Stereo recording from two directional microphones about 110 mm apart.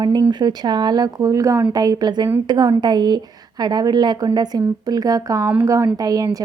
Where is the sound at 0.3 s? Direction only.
40° right (ahead or behind).